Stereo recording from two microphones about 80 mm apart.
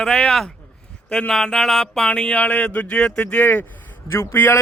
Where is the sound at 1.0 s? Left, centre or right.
Centre.